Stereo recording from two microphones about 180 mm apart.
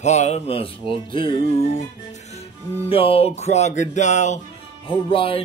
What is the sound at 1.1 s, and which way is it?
Music, 30° left (ahead or behind).